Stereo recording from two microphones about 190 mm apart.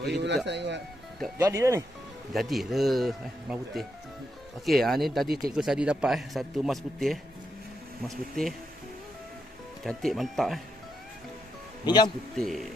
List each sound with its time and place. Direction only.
0.0 s speech: 60° right (ahead or behind)
1.4 s speech: 15° right (ahead or behind)
2.3 s a man's voice: centre (ahead or behind)
9.8 s a man's voice: centre (ahead or behind)
11.8 s speech: 20° left (ahead or behind)
12.4 s a man's voice: centre (ahead or behind)